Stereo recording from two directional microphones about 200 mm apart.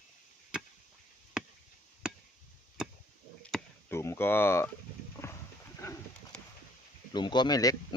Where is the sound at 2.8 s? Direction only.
5° right (ahead or behind).